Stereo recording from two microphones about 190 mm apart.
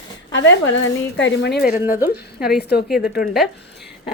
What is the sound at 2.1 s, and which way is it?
Speech, 55° left (ahead or behind).